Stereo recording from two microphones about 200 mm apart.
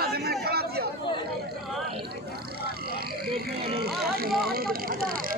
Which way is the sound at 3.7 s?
50° right (ahead or behind).